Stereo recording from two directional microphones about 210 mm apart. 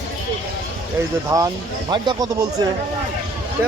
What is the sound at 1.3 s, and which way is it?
Speech, 15° right (ahead or behind).